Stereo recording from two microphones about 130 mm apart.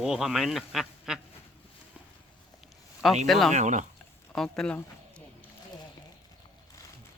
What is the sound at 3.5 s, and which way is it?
Speech, 65° right (ahead or behind).